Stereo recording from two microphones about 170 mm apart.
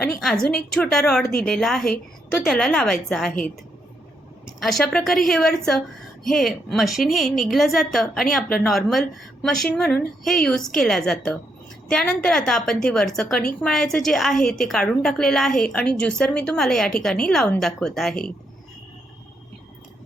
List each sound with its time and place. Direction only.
0.2 s a woman's voice: centre (ahead or behind)
4.6 s a woman's voice: 5° left (ahead or behind)